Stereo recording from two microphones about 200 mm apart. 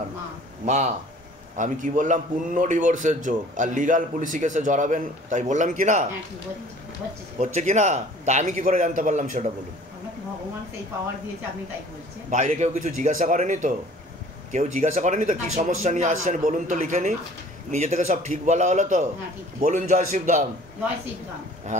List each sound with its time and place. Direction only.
0.7 s a man's voice: 35° right (ahead or behind)
7.3 s a man's voice: 35° right (ahead or behind)
12.3 s a man's voice: 35° right (ahead or behind)
21.7 s a man's voice: 40° right (ahead or behind)